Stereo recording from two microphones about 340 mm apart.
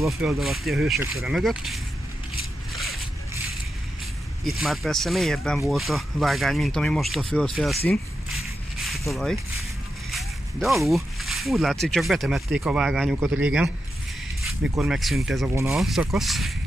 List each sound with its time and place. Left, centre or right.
0.0 s speech: centre
4.5 s speech: centre
7.9 s a sound: centre
10.1 s speech: centre
14.8 s speech: centre